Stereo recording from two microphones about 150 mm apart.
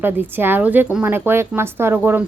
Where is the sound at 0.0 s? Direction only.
15° right (ahead or behind).